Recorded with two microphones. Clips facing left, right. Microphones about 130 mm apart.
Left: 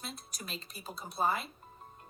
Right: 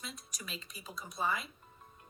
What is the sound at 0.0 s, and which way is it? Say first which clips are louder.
Speech: left 2 dB; 35° left (ahead or behind).